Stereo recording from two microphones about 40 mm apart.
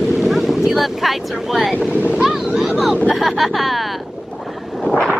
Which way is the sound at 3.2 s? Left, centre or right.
Centre.